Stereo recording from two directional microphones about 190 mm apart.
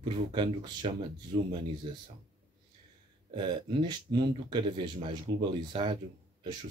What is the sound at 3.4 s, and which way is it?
Speech, 25° right (ahead or behind).